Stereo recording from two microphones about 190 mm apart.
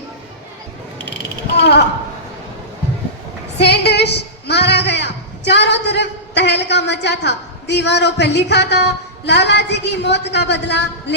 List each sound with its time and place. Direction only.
1.5 s a sound: 60° left (ahead or behind)
3.6 s female singing: 60° left (ahead or behind)
5.5 s a woman's voice: 65° left (ahead or behind)